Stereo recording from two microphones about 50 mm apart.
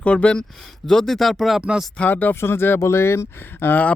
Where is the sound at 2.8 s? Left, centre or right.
Left.